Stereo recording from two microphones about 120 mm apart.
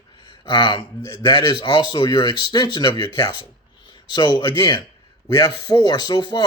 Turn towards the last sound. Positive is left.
turn(degrees=40)  # may be behind; listen again after turning